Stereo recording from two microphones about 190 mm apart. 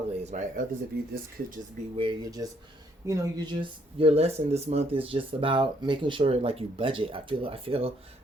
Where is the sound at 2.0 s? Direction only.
20° right (ahead or behind).